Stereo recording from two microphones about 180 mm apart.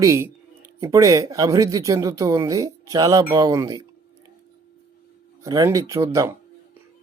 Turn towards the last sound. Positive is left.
turn(degrees=-15)  # may be behind; listen again after turning